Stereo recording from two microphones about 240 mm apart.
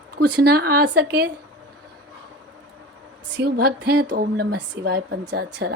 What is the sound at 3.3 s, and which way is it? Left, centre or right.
A woman's voice, right.